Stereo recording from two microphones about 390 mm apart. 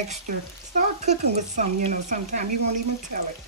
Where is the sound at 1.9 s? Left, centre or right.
Centre.